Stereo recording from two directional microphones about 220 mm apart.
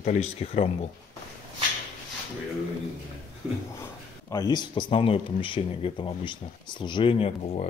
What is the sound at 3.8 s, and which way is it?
Speech, 15° left (ahead or behind).